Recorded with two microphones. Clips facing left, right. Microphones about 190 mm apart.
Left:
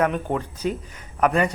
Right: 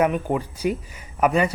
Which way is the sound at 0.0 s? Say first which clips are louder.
Right 2 dB; 5° right (ahead or behind).